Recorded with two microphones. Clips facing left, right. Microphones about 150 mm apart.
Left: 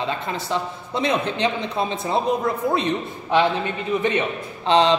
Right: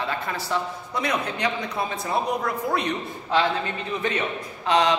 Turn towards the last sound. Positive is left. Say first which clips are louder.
# left 4 dB
turn(degrees=30)  # may be behind; listen again after turning